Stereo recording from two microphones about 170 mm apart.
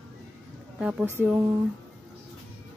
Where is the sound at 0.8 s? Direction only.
5° right (ahead or behind).